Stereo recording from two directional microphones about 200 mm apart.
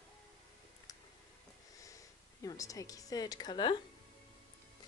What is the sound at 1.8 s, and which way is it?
Speech, 15° left (ahead or behind).